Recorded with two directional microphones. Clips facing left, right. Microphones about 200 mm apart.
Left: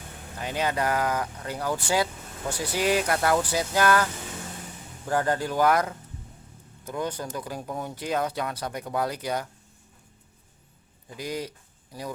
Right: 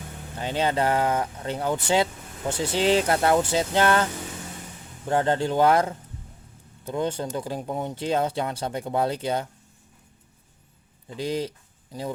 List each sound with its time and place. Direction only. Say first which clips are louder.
0.3 s speech: right 3 dB; 30° right (ahead or behind)
11.1 s speech: right 5 dB; 30° right (ahead or behind)